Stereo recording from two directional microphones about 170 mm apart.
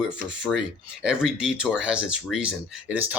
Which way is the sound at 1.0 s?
5° right (ahead or behind).